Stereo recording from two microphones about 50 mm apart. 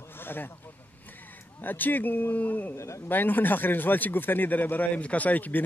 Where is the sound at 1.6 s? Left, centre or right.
Left.